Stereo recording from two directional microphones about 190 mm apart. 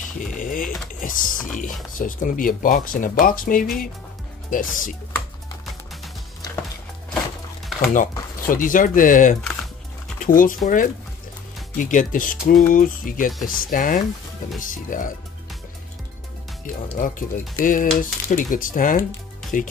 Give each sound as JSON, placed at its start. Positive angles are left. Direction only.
{"t": 0.2, "sound": "speech", "side_deg": 45}
{"t": 7.8, "sound": "speech", "side_deg": 45}
{"t": 9.4, "sound": "typing", "side_deg": 0}
{"t": 10.2, "sound": "speech", "side_deg": 45}
{"t": 17.0, "sound": "speech", "side_deg": 45}